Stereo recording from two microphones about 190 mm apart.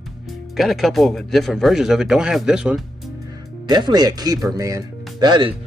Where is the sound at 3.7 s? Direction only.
20° right (ahead or behind).